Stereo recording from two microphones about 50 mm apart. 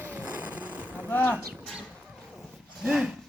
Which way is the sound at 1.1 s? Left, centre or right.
Left.